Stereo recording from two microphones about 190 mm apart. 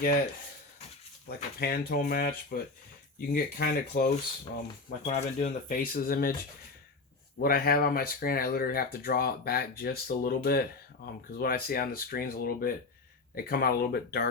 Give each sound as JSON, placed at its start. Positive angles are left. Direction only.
{"t": 0.0, "sound": "speech", "side_deg": 50}
{"t": 1.5, "sound": "speech", "side_deg": 55}
{"t": 5.0, "sound": "speech", "side_deg": 40}
{"t": 7.3, "sound": "speech", "side_deg": 55}